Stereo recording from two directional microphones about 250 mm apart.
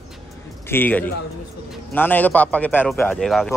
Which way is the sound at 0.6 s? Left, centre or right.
Centre.